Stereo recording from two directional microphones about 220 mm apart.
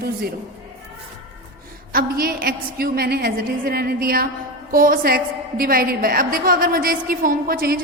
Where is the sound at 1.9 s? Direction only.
40° right (ahead or behind).